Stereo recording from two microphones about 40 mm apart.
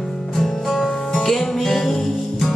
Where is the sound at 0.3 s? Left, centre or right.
Centre.